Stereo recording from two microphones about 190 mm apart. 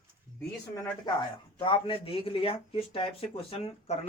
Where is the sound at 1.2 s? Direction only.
25° left (ahead or behind).